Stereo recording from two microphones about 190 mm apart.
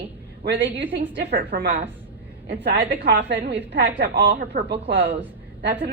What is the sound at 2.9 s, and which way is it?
A woman's voice, 60° right (ahead or behind).